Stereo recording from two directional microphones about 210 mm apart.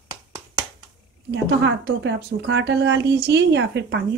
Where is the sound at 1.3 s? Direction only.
55° right (ahead or behind).